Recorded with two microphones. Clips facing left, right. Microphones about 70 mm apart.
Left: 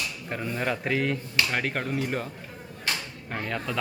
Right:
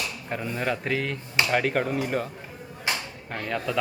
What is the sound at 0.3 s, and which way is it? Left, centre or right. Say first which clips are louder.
A man's voice: right 1 dB; centre.